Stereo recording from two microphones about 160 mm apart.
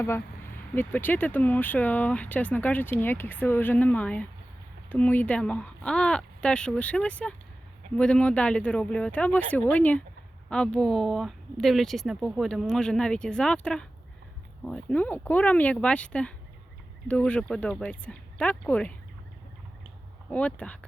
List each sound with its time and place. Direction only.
0.7 s speech: 10° left (ahead or behind)
20.3 s speech: 10° left (ahead or behind)